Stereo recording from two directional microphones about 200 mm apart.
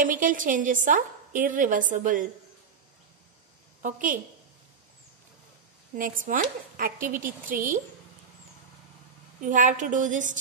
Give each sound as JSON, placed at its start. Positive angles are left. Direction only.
{"t": 0.0, "sound": "a woman's voice", "side_deg": -40}
{"t": 3.8, "sound": "a woman's voice", "side_deg": -40}
{"t": 5.9, "sound": "speech", "side_deg": -40}
{"t": 9.4, "sound": "a woman's voice", "side_deg": -40}